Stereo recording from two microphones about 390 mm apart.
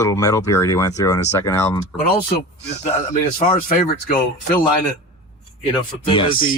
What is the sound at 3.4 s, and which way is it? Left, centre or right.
Speech, left.